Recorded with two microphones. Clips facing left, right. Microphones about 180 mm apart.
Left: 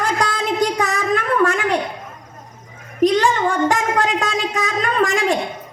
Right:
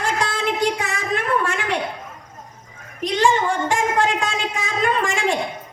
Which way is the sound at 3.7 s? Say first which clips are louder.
Left 1 dB; 40° left (ahead or behind).